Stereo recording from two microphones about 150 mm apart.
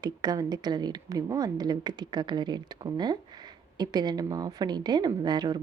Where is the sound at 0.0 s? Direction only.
25° right (ahead or behind).